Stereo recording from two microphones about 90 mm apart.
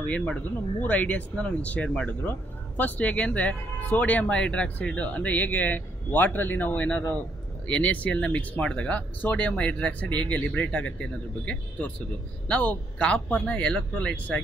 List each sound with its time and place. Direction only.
0.0 s speech: 15° left (ahead or behind)
12.4 s speech: 15° left (ahead or behind)